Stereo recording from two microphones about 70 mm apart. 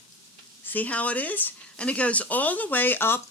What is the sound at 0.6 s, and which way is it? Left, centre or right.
Speech, left.